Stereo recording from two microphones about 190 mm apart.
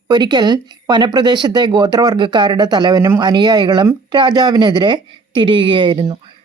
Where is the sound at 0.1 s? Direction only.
20° right (ahead or behind).